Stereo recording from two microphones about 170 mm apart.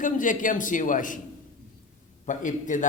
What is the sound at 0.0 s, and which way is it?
Speech, 50° left (ahead or behind).